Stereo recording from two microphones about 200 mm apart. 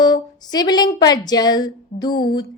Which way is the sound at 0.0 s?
20° left (ahead or behind).